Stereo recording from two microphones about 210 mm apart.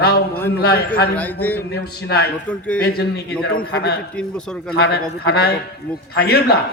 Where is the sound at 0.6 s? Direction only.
45° left (ahead or behind).